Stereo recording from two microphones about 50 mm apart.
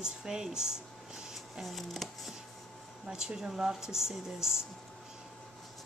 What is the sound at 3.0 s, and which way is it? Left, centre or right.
Speech, centre.